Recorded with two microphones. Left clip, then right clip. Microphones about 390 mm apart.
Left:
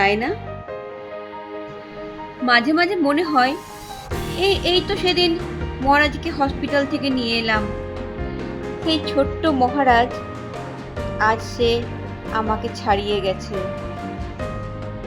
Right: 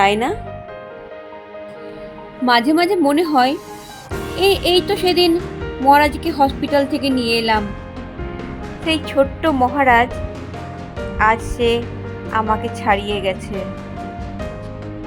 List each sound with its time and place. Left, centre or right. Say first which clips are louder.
0.0 s a woman's voice: right 3 dB; centre
2.5 s a woman's voice: right 2 dB; centre
9.1 s a woman's voice: right 5 dB; centre
11.2 s music: right 3 dB; centre
12.3 s a woman's voice: right 4 dB; centre